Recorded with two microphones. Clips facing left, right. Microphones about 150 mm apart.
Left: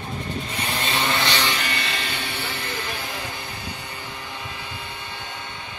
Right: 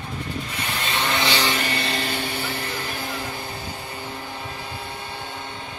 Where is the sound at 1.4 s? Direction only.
40° right (ahead or behind).